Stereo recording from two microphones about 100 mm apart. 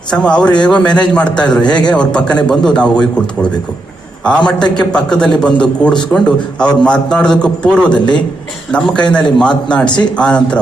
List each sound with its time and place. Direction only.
0.1 s a man's voice: 10° left (ahead or behind)